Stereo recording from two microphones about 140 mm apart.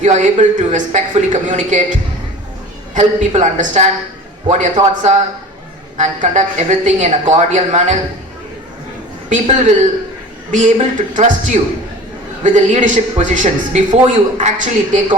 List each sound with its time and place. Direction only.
0.0 s a man's voice: 55° right (ahead or behind)
2.9 s a man's voice: 60° right (ahead or behind)
9.3 s a man's voice: 55° right (ahead or behind)